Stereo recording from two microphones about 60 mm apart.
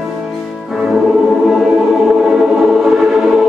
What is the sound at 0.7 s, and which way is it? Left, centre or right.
Music, centre.